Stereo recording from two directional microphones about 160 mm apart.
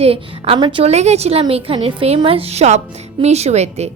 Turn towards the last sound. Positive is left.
turn(degrees=-45)  # may be behind; listen again after turning